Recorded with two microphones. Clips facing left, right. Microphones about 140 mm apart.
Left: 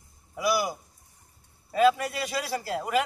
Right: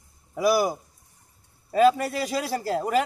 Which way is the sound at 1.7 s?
40° right (ahead or behind).